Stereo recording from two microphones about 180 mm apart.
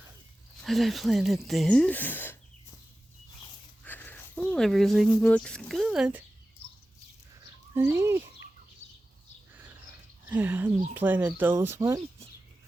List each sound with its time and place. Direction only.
0.6 s speech: centre (ahead or behind)
3.8 s a sound: 10° left (ahead or behind)
5.2 s speech: 5° left (ahead or behind)
7.7 s speech: 15° right (ahead or behind)
8.8 s a sound: 40° left (ahead or behind)
10.2 s speech: 10° right (ahead or behind)